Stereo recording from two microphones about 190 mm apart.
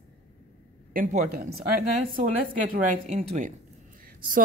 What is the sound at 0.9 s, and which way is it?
Speech, 45° right (ahead or behind).